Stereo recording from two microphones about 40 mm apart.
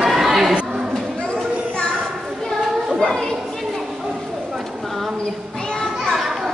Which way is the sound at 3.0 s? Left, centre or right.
Centre.